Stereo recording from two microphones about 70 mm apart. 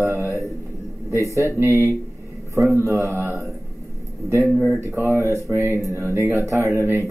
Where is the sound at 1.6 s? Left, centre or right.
Right.